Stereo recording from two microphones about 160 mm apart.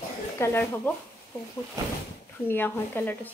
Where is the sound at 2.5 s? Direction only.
15° left (ahead or behind).